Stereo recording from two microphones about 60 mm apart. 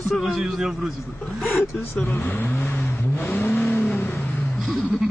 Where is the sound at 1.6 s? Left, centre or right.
Left.